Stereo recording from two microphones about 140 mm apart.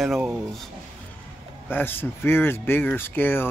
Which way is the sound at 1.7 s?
15° left (ahead or behind).